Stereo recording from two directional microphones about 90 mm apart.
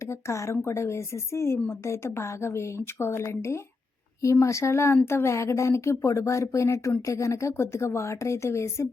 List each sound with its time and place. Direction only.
0.0 s a woman's voice: 35° left (ahead or behind)